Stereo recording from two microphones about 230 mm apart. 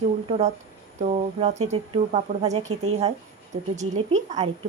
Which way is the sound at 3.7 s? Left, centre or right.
Right.